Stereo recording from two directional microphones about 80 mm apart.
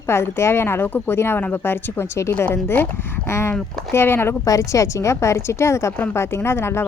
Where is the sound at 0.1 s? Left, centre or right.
Left.